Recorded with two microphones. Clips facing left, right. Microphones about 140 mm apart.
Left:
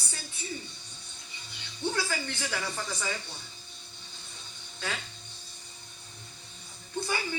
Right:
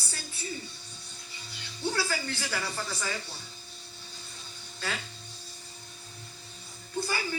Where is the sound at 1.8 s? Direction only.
5° right (ahead or behind).